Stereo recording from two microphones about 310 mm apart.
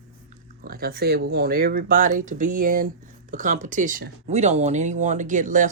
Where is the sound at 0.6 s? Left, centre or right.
Right.